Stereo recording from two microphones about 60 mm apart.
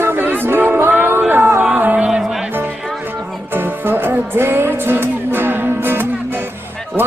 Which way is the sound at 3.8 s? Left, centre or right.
Right.